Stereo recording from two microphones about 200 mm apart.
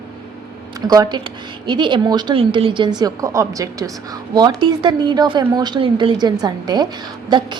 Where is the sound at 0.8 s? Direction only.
20° right (ahead or behind).